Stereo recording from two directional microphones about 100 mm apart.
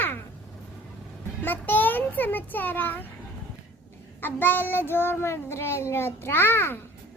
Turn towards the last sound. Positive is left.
turn(degrees=20)  # may be behind; listen again after turning